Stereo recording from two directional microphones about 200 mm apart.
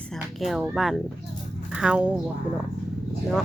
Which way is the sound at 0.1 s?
Centre (ahead or behind).